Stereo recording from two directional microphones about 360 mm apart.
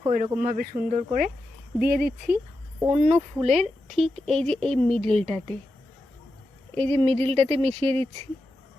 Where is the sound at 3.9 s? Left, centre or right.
Centre.